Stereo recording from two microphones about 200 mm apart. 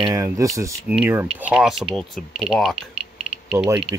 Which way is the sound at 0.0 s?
15° right (ahead or behind).